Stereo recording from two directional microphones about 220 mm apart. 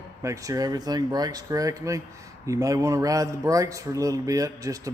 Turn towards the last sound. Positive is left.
turn(degrees=-15)  # may be behind; listen again after turning